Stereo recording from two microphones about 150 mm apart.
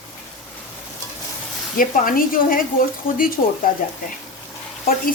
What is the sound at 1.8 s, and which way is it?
Speech, 70° left (ahead or behind).